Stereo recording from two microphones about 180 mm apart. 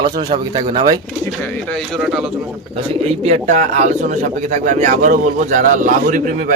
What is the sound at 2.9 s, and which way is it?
A man's voice, 35° right (ahead or behind).